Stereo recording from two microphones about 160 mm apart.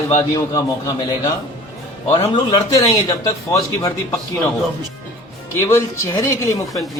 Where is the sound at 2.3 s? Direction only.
25° left (ahead or behind).